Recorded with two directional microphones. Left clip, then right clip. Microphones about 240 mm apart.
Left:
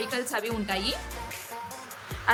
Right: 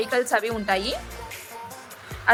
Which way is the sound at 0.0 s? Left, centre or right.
Centre.